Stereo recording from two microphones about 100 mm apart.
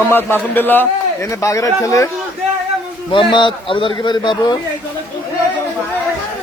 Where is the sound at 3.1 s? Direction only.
55° left (ahead or behind).